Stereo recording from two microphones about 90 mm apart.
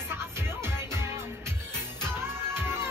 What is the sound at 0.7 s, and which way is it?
Music, 30° right (ahead or behind).